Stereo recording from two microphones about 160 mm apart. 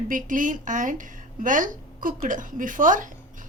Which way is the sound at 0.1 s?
55° right (ahead or behind).